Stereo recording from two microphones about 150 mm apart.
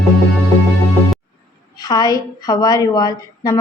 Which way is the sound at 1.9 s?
25° left (ahead or behind).